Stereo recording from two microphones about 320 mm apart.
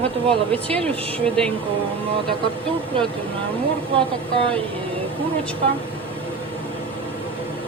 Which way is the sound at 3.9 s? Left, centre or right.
Centre.